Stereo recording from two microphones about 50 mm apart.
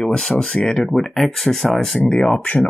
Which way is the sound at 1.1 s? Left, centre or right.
Centre.